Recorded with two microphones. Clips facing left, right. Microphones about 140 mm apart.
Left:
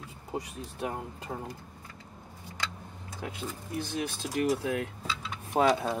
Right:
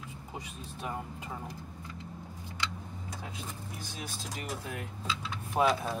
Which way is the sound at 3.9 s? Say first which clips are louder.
Left 11 dB; 70° left (ahead or behind).